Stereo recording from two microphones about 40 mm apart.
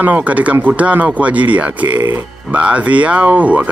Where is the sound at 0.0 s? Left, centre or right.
Right.